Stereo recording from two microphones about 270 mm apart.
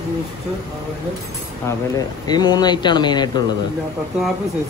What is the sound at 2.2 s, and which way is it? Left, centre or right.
Speech, centre.